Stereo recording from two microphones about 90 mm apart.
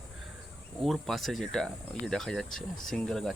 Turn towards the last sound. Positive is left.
turn(degrees=5)  # may be behind; listen again after turning